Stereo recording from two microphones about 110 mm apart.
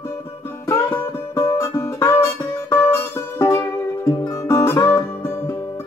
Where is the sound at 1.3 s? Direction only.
25° left (ahead or behind).